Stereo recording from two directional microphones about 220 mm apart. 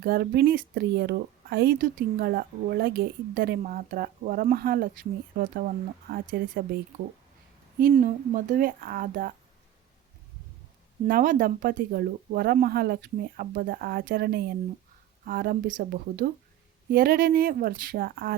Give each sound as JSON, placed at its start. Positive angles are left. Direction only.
{"t": 0.0, "sound": "speech", "side_deg": -45}
{"t": 7.9, "sound": "speech", "side_deg": -35}
{"t": 11.0, "sound": "speech", "side_deg": -35}